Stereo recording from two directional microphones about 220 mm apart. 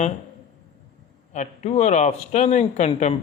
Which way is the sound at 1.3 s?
30° left (ahead or behind).